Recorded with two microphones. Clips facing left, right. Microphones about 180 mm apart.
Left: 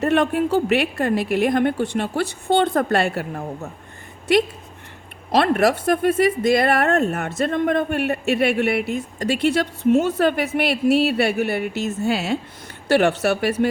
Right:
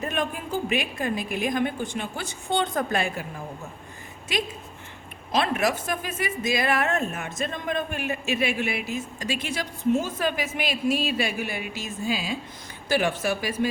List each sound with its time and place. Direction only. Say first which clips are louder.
0.0 s speech: left 11 dB; 70° left (ahead or behind)
5.3 s speech: left 7 dB; 60° left (ahead or behind)